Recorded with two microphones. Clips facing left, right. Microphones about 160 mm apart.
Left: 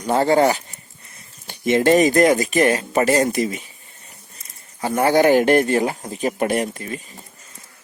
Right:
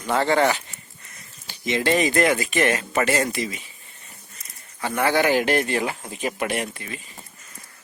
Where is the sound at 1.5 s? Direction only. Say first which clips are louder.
Left 7 dB; 50° left (ahead or behind).